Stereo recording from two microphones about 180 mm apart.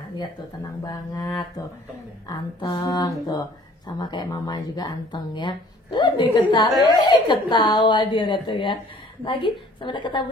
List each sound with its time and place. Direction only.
0.8 s speech: 20° left (ahead or behind)